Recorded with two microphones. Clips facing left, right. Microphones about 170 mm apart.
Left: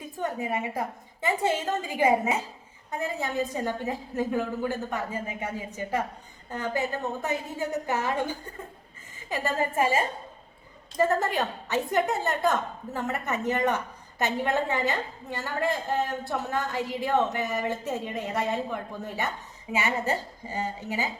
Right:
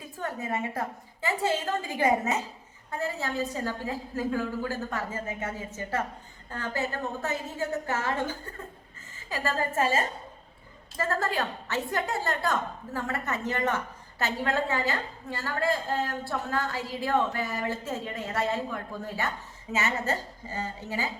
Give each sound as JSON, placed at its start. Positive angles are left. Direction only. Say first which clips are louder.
{"t": 0.2, "sound": "a woman's voice", "louder": "left 2 dB", "side_deg": 15}